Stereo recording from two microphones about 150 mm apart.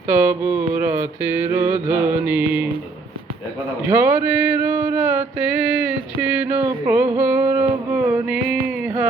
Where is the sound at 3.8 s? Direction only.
15° right (ahead or behind).